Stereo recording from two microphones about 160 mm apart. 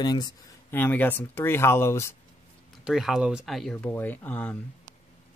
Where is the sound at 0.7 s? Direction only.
10° left (ahead or behind).